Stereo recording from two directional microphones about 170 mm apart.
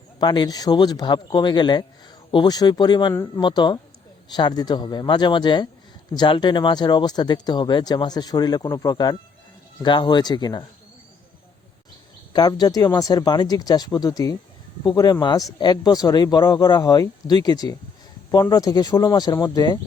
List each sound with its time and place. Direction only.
0.2 s speech: 25° left (ahead or behind)
12.3 s speech: 25° left (ahead or behind)